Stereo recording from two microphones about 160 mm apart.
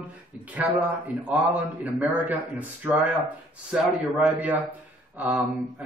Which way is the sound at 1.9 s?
10° right (ahead or behind).